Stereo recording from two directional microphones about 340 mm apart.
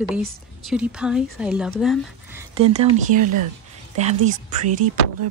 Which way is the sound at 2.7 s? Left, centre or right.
Right.